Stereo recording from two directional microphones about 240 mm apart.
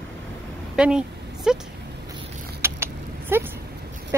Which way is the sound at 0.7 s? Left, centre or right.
Centre.